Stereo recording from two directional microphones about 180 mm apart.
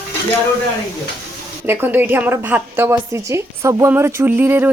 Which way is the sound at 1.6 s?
10° right (ahead or behind).